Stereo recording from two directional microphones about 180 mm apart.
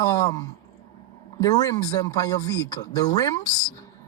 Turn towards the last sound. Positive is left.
turn(degrees=20)  # may be behind; listen again after turning